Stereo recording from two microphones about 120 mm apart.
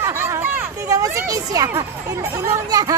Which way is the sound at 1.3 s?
30° right (ahead or behind).